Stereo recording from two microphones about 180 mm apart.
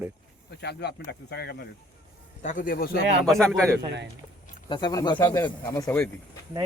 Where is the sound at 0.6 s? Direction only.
65° left (ahead or behind).